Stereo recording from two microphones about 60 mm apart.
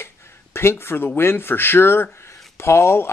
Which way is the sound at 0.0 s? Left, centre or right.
Left.